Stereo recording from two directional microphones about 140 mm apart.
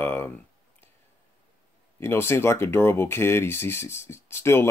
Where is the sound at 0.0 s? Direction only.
15° left (ahead or behind).